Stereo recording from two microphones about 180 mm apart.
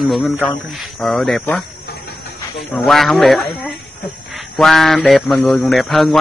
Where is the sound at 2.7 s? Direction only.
Centre (ahead or behind).